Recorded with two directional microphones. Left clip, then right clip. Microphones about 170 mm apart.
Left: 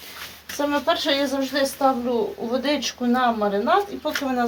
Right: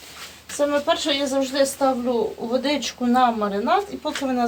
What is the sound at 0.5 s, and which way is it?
Speech, 35° left (ahead or behind).